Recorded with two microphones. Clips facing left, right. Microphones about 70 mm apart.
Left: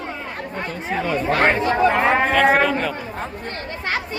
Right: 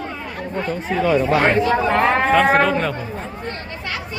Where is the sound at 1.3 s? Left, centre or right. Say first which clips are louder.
Right 2 dB; left.